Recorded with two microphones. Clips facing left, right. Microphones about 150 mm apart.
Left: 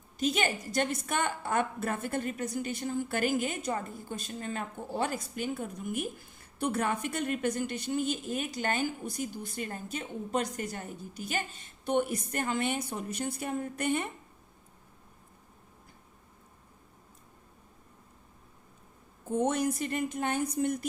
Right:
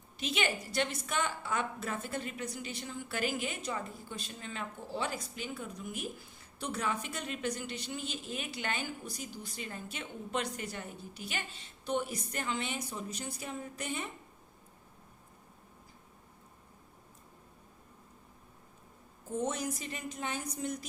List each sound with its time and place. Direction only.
0.2 s a woman's voice: 45° left (ahead or behind)
19.3 s speech: 60° left (ahead or behind)